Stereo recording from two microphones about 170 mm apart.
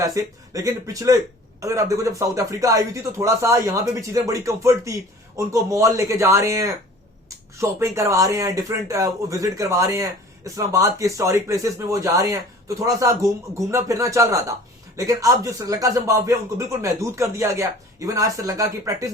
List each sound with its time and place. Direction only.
0.0 s speech: 20° right (ahead or behind)